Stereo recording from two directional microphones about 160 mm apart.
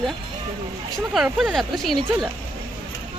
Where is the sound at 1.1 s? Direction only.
5° right (ahead or behind).